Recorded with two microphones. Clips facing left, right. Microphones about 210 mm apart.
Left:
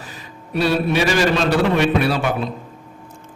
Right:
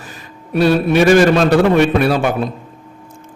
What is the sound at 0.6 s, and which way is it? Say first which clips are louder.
Speech: right 6 dB; 50° right (ahead or behind).